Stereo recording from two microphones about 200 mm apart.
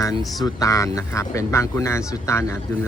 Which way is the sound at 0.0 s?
15° left (ahead or behind).